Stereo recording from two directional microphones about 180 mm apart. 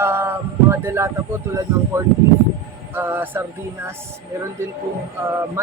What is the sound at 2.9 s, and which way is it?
Speech, 10° right (ahead or behind).